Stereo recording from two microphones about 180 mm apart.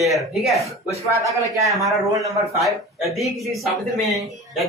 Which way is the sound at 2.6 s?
Centre (ahead or behind).